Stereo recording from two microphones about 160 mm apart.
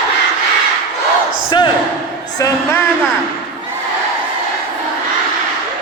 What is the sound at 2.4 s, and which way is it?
Speech, 20° left (ahead or behind).